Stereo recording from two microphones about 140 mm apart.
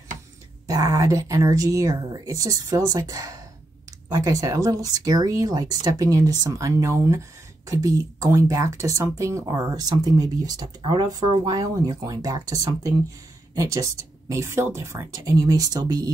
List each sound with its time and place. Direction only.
0.7 s speech: 25° right (ahead or behind)